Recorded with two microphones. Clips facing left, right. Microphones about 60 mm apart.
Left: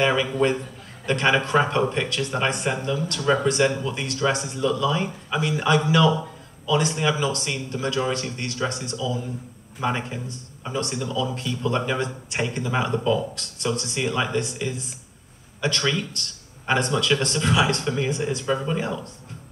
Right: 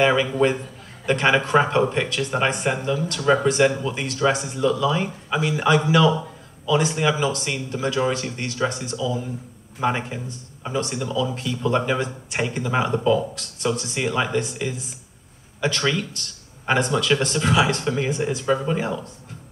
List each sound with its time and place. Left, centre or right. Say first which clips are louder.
0.0 s speech: right 2 dB; right